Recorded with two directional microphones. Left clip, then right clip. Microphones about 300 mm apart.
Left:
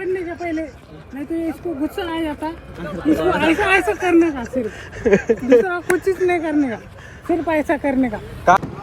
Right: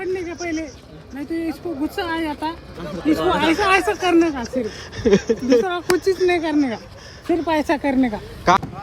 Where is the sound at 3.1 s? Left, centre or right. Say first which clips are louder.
Left 1 dB; centre.